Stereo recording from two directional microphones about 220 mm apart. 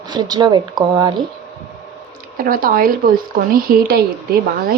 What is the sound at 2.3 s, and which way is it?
A woman's voice, 40° right (ahead or behind).